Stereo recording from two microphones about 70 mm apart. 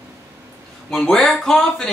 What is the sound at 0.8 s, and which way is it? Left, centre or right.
Speech, centre.